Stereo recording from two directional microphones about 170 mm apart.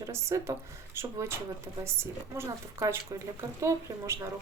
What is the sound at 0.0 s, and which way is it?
Speech, 15° right (ahead or behind).